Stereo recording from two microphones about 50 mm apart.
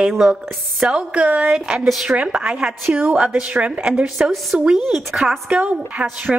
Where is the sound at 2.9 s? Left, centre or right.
Right.